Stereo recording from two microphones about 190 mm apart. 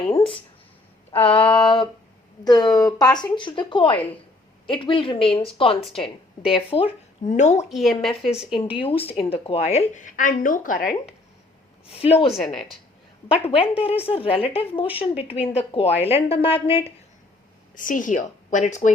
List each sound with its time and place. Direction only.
0.1 s a sound: 30° left (ahead or behind)
1.3 s a woman's voice: 30° left (ahead or behind)
3.9 s a woman's voice: 10° left (ahead or behind)
4.7 s a woman's voice: 25° left (ahead or behind)
6.0 s a woman's voice: centre (ahead or behind)
6.7 s a woman's voice: 30° left (ahead or behind)
7.7 s speech: centre (ahead or behind)
8.5 s speech: 30° left (ahead or behind); by 10.8 s 45° left (ahead or behind)
11.9 s speech: 30° left (ahead or behind)
12.3 s speech: 5° left (ahead or behind)
13.2 s a woman's voice: 30° left (ahead or behind)
17.7 s a woman's voice: 45° left (ahead or behind)